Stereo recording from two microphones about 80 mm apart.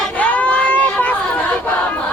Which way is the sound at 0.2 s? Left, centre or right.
Centre.